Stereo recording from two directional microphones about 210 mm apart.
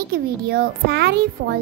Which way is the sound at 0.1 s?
50° right (ahead or behind).